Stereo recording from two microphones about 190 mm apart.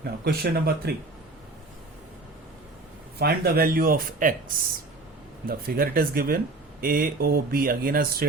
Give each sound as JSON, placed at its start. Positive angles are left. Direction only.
{"t": 0.0, "sound": "speech", "side_deg": -50}
{"t": 3.2, "sound": "speech", "side_deg": -55}